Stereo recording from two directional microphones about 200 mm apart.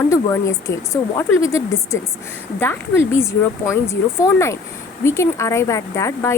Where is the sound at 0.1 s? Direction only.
15° left (ahead or behind).